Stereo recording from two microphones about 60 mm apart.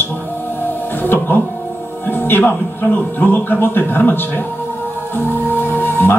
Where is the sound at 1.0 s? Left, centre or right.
Left.